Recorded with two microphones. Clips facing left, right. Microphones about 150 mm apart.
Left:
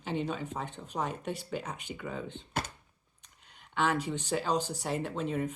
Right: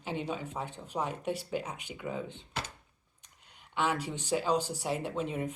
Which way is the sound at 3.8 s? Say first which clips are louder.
Left 2 dB; 10° right (ahead or behind).